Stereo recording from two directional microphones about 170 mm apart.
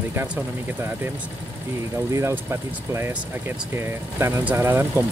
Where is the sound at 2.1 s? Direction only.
15° right (ahead or behind).